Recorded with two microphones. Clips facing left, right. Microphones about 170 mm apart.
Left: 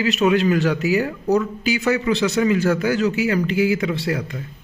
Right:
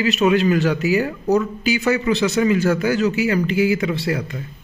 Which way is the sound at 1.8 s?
20° right (ahead or behind).